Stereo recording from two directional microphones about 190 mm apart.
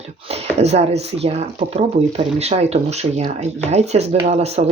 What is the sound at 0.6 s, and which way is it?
Speech, 35° right (ahead or behind).